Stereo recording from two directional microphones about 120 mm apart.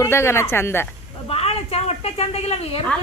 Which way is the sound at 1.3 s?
55° left (ahead or behind).